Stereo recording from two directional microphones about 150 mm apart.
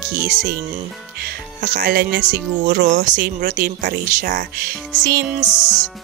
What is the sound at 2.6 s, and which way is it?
Speech, 75° right (ahead or behind).